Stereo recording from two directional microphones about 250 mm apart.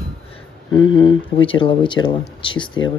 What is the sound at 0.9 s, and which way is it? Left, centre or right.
Speech, centre.